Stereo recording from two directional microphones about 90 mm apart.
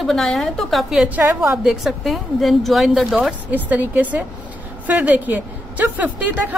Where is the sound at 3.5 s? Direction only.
20° right (ahead or behind).